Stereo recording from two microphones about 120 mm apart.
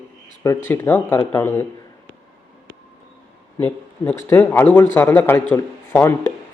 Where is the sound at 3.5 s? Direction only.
20° left (ahead or behind).